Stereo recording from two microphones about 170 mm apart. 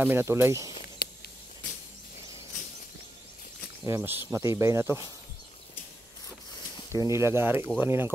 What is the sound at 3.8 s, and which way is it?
Speech, 15° right (ahead or behind).